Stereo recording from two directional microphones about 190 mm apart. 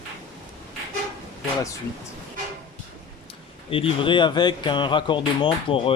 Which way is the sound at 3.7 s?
30° left (ahead or behind).